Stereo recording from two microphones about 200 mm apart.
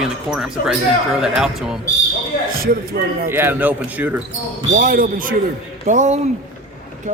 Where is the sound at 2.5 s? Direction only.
50° right (ahead or behind).